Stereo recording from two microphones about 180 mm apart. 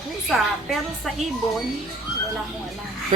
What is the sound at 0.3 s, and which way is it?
Speech, centre (ahead or behind).